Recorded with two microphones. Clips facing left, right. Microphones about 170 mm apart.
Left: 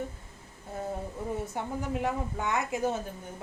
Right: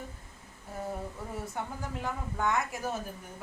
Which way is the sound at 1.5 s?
25° left (ahead or behind).